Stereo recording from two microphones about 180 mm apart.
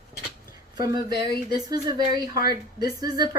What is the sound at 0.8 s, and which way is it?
A woman's voice, 20° right (ahead or behind).